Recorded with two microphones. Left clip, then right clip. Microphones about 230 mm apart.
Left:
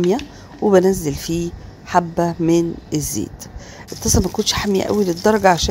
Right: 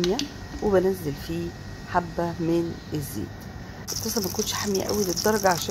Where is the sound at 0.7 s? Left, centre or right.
Left.